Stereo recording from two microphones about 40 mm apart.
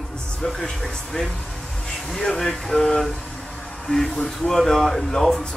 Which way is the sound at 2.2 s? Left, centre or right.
Centre.